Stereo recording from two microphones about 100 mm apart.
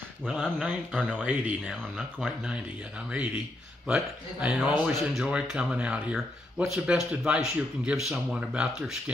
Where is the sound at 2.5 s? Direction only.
10° right (ahead or behind).